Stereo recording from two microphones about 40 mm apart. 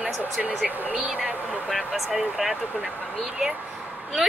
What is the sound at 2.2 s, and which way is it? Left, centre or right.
Speech, right.